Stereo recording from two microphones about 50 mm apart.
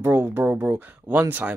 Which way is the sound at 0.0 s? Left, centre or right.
Right.